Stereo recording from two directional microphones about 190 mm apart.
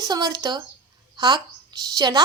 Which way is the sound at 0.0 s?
20° right (ahead or behind).